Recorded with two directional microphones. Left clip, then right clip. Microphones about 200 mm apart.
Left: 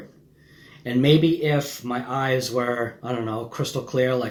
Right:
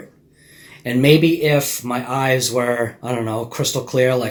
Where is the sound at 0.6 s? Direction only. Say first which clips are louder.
Right 5 dB; 30° right (ahead or behind).